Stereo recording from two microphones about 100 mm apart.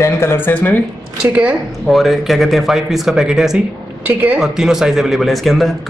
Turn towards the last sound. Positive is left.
turn(degrees=0)  # may be behind; listen again after turning